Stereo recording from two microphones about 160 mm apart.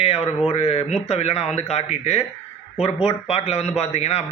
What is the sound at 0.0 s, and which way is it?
A man's voice, 40° left (ahead or behind).